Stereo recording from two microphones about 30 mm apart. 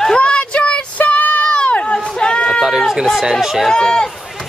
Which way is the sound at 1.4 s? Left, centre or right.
Left.